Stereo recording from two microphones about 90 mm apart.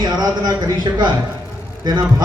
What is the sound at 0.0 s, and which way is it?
Speech, 50° right (ahead or behind).